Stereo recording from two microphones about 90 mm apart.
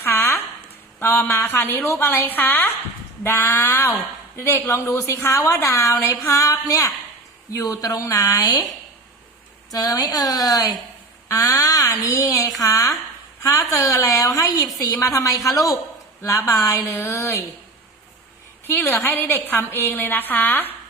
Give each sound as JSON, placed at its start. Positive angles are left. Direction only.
{"t": 0.0, "sound": "a sound", "side_deg": 30}
{"t": 0.9, "sound": "a woman's voice", "side_deg": 25}
{"t": 9.7, "sound": "a woman's voice", "side_deg": 45}
{"t": 18.6, "sound": "a woman's voice", "side_deg": 25}